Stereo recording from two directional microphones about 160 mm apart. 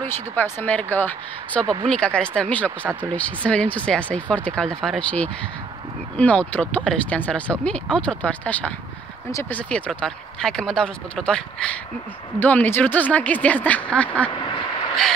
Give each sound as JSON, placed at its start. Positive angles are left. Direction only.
{"t": 0.4, "sound": "speech", "side_deg": 10}
{"t": 14.3, "sound": "quack", "side_deg": 35}